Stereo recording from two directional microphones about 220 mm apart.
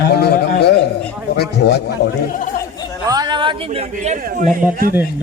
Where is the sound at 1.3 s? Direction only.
50° left (ahead or behind).